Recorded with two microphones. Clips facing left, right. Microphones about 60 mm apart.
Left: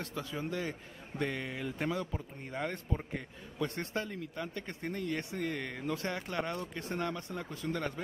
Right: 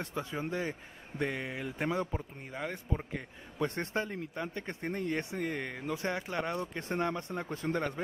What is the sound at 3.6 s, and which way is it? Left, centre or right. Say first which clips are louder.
Speech: right 3 dB; right.